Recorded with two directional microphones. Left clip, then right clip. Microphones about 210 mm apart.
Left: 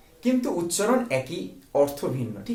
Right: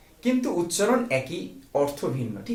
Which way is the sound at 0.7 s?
20° left (ahead or behind).